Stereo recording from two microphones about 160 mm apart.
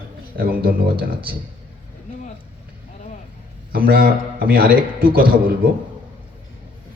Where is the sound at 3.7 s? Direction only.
70° right (ahead or behind).